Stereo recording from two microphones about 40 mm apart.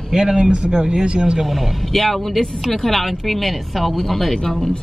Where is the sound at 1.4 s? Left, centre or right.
Centre.